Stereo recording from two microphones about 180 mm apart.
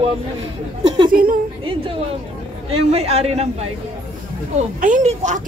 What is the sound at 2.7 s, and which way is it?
Speech, 35° right (ahead or behind).